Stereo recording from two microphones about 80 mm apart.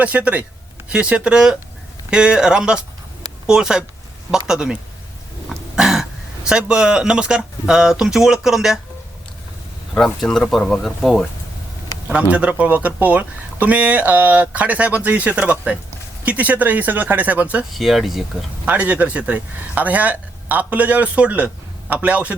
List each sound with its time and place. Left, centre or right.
0.0 s speech: centre
9.9 s speech: centre
11.0 s speech: centre
12.3 s speech: centre
17.7 s speech: centre
18.6 s speech: centre